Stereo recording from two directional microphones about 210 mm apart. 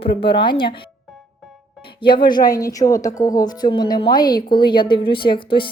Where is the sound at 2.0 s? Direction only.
20° left (ahead or behind).